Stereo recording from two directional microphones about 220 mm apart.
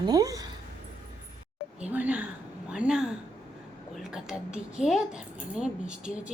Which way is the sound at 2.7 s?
5° right (ahead or behind).